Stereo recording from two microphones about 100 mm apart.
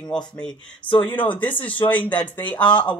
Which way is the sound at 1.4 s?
15° left (ahead or behind).